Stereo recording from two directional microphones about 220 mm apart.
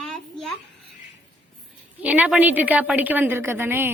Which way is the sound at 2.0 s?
5° right (ahead or behind).